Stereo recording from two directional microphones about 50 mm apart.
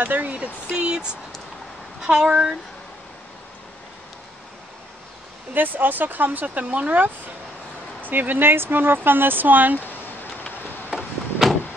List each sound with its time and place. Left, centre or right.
0.0 s speech: right
5.5 s speech: right
11.0 s a sound: centre